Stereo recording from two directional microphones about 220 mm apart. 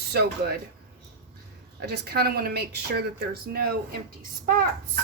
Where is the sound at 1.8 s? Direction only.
45° right (ahead or behind).